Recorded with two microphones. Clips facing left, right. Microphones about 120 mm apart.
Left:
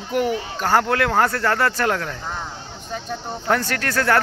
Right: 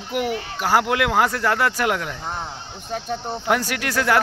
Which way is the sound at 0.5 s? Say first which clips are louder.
Even; 10° right (ahead or behind).